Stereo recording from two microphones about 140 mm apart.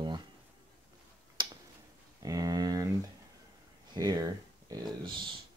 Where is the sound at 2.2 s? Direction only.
25° right (ahead or behind).